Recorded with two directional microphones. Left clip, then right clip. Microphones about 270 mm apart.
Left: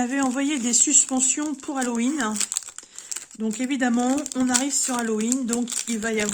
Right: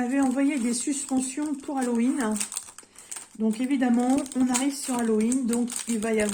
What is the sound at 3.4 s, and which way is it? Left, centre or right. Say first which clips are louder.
Speech: left 1 dB; left.